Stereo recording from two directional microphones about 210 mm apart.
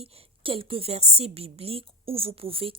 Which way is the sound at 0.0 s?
30° right (ahead or behind).